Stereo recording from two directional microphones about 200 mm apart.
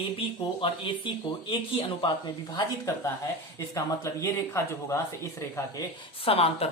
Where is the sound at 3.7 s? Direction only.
15° left (ahead or behind).